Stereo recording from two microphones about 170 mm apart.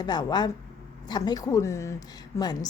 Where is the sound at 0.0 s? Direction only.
25° left (ahead or behind).